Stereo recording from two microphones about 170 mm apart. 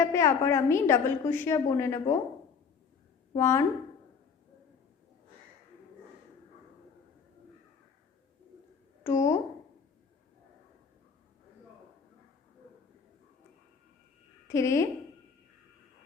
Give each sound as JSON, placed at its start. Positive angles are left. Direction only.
{"t": 0.0, "sound": "a woman's voice", "side_deg": 15}
{"t": 3.3, "sound": "a woman's voice", "side_deg": 15}
{"t": 9.0, "sound": "speech", "side_deg": 20}
{"t": 14.4, "sound": "a woman's voice", "side_deg": 15}